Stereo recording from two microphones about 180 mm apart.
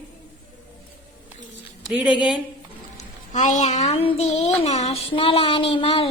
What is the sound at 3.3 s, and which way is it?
Speech, 40° left (ahead or behind).